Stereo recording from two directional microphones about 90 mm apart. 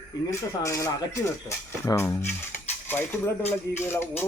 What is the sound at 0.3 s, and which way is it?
Speech, 35° left (ahead or behind).